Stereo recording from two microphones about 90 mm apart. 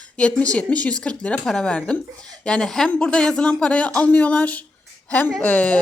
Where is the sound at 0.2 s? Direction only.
15° left (ahead or behind).